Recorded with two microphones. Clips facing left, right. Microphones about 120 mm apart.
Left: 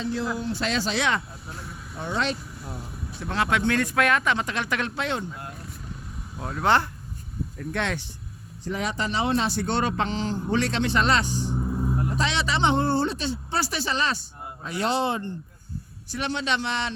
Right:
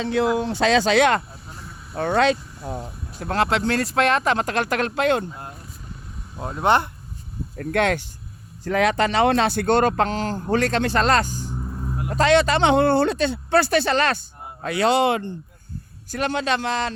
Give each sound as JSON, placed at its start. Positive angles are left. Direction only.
{"t": 0.0, "sound": "speech", "side_deg": -70}
{"t": 0.3, "sound": "speech", "side_deg": -85}
{"t": 3.2, "sound": "speech", "side_deg": -45}
{"t": 6.3, "sound": "speech", "side_deg": -20}
{"t": 7.5, "sound": "speech", "side_deg": -55}
{"t": 8.7, "sound": "speech", "side_deg": -75}
{"t": 11.5, "sound": "vehicle", "side_deg": 10}
{"t": 12.0, "sound": "speech", "side_deg": -55}
{"t": 12.6, "sound": "speech", "side_deg": -65}
{"t": 16.1, "sound": "speech", "side_deg": -45}